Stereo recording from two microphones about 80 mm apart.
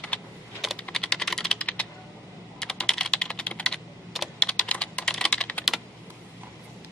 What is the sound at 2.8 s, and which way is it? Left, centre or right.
Computer keyboard, centre.